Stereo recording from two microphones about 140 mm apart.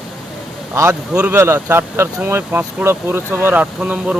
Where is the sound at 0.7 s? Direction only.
20° right (ahead or behind).